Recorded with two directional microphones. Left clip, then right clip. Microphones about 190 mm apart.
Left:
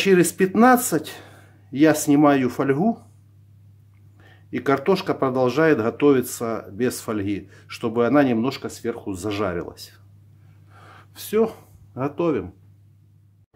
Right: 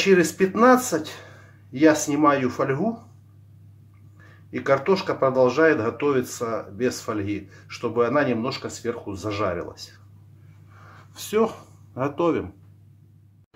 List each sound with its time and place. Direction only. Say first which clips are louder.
0.0 s speech: left 1 dB; 60° left (ahead or behind)
4.2 s speech: left 1 dB; 55° left (ahead or behind)
11.1 s speech: left 1 dB; 25° left (ahead or behind)